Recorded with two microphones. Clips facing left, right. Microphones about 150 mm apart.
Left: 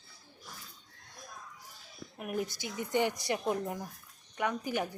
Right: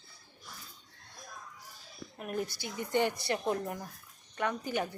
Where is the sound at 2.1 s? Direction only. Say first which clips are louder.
Left 1 dB; 15° left (ahead or behind).